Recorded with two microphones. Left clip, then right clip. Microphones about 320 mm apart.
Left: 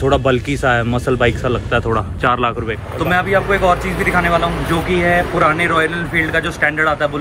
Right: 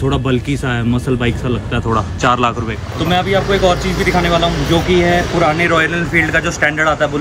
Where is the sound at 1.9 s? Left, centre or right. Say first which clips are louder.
Right 6 dB; right.